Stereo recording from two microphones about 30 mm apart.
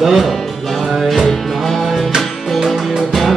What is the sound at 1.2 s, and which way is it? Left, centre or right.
Music, centre.